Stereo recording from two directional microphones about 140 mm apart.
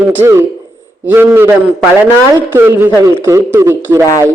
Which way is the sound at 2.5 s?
15° right (ahead or behind).